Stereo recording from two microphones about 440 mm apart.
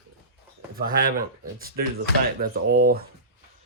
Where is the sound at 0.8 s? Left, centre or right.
Centre.